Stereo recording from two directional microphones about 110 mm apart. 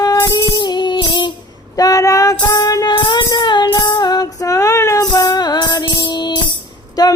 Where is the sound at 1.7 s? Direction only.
30° left (ahead or behind).